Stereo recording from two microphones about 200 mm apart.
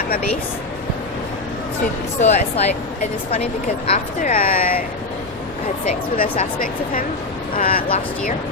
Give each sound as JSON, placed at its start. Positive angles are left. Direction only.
{"t": 2.2, "sound": "speech", "side_deg": 35}
{"t": 5.9, "sound": "speech", "side_deg": 35}
{"t": 7.8, "sound": "speech", "side_deg": 30}